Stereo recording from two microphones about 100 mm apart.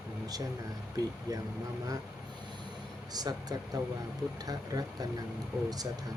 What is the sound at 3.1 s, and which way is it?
Speech, 40° right (ahead or behind).